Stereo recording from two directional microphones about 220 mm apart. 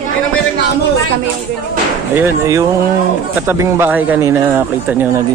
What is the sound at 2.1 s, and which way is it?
A man's voice, 10° right (ahead or behind).